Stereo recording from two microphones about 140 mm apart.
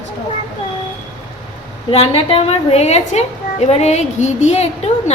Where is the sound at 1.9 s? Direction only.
45° left (ahead or behind).